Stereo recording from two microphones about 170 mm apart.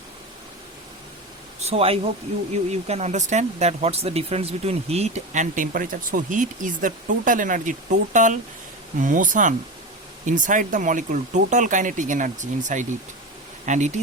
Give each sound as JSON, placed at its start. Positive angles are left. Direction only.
{"t": 1.6, "sound": "speech", "side_deg": -35}